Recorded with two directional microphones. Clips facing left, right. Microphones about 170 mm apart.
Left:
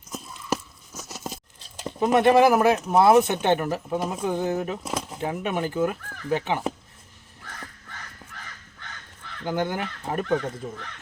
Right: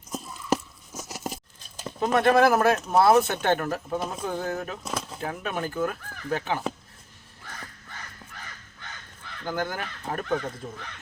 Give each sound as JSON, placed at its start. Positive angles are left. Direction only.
{"t": 0.9, "sound": "a sound", "side_deg": -10}
{"t": 2.0, "sound": "speech", "side_deg": 15}
{"t": 9.4, "sound": "speech", "side_deg": 20}